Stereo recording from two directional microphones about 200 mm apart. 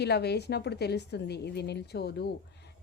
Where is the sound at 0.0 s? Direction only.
55° left (ahead or behind).